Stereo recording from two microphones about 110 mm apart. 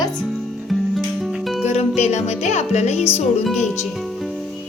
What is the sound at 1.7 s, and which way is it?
Music, 80° left.